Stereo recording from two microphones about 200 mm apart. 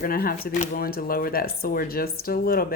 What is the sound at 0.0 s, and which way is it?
Speech, 45° left (ahead or behind).